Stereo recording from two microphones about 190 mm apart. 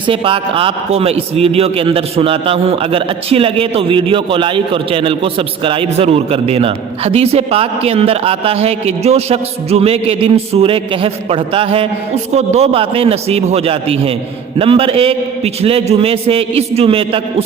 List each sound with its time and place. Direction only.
0.1 s a man's voice: 30° right (ahead or behind)